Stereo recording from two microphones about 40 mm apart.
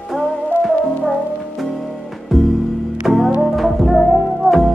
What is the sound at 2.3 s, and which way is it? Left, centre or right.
Music, centre.